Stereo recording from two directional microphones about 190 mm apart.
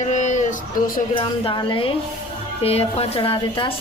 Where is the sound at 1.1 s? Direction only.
25° left (ahead or behind).